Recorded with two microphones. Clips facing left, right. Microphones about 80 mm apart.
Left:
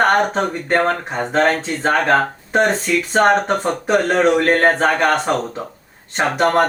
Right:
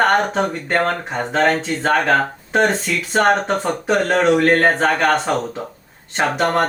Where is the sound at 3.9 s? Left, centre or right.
Centre.